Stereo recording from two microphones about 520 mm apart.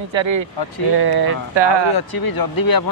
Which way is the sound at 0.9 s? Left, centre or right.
Right.